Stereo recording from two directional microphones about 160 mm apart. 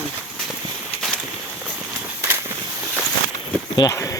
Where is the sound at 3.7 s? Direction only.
20° left (ahead or behind).